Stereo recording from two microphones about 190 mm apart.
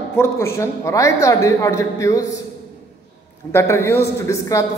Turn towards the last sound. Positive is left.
turn(degrees=15)  # may be behind; listen again after turning